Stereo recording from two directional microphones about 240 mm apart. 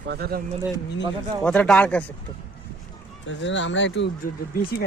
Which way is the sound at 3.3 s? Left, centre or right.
Left.